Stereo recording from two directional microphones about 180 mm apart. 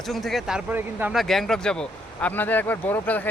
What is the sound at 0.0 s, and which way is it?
Speech, centre (ahead or behind).